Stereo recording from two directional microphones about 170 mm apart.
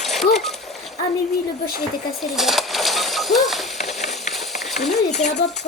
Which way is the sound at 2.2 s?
Centre (ahead or behind).